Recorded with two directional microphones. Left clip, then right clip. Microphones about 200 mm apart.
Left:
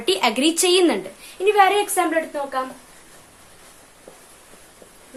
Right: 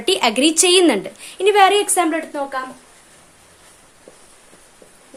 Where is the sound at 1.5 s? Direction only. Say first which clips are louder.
Right 3 dB; 50° right (ahead or behind).